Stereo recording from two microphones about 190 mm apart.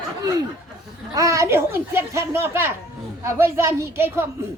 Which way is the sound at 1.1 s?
15° right (ahead or behind).